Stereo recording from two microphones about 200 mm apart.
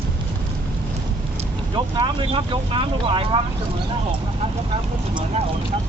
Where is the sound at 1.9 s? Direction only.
25° right (ahead or behind).